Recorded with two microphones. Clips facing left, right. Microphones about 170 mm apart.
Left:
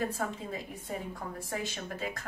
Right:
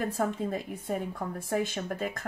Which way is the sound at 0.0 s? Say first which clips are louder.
Right 4 dB; 50° right (ahead or behind).